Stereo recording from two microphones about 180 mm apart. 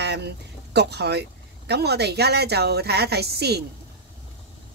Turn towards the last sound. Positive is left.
turn(degrees=-65)  # may be behind; listen again after turning